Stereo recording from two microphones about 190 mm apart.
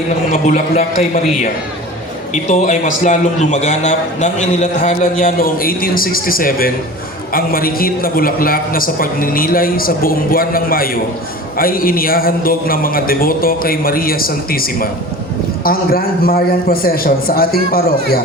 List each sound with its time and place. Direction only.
0.3 s a man's voice: 35° left (ahead or behind)
2.3 s a man's voice: 40° left (ahead or behind)